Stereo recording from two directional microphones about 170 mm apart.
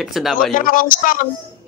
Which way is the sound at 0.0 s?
Centre (ahead or behind).